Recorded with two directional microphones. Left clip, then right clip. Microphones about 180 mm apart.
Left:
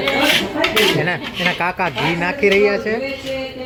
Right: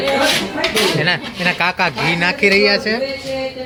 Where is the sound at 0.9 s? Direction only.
Centre (ahead or behind).